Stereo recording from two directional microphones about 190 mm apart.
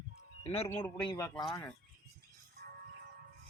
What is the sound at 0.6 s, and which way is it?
Speech, 10° left (ahead or behind).